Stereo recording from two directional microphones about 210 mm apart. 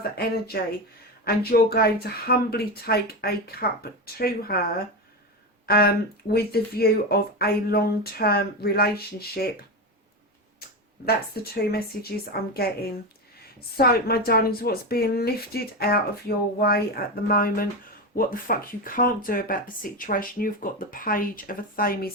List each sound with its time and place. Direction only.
0.2 s speech: 45° left (ahead or behind)
5.6 s speech: 45° left (ahead or behind)
11.5 s speech: 45° left (ahead or behind)